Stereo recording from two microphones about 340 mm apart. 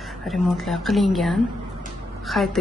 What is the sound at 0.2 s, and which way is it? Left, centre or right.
A woman's voice, centre.